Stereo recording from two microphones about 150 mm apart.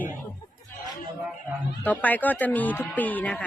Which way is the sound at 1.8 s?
10° left (ahead or behind).